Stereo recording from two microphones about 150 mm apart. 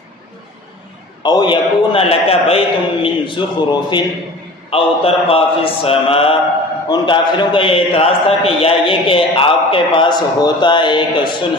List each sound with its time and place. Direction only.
1.2 s a man's voice: 30° left (ahead or behind)